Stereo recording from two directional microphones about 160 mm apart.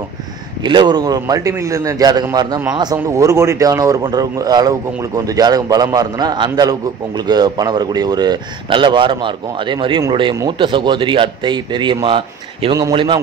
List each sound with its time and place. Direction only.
0.7 s speech: 30° right (ahead or behind)